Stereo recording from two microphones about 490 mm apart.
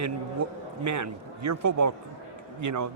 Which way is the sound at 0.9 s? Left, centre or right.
Right.